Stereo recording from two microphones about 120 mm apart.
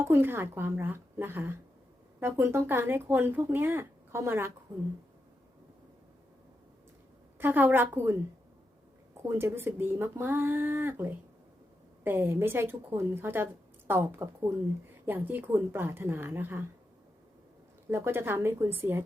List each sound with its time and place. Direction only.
0.0 s speech: 20° right (ahead or behind)
7.3 s speech: 15° right (ahead or behind)
9.2 s speech: 20° right (ahead or behind)
17.9 s speech: 20° right (ahead or behind)